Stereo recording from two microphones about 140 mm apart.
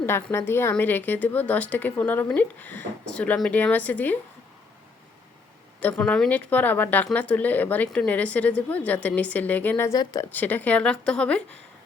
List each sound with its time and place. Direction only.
0.0 s a woman's voice: 15° left (ahead or behind)
5.8 s a woman's voice: 10° left (ahead or behind)
10.0 s speech: 30° left (ahead or behind)
10.3 s a woman's voice: 10° left (ahead or behind)